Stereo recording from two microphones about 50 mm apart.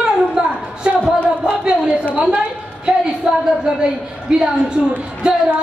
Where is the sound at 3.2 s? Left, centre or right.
Centre.